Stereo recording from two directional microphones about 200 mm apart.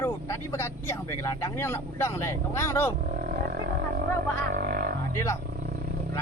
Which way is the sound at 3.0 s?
50° right (ahead or behind).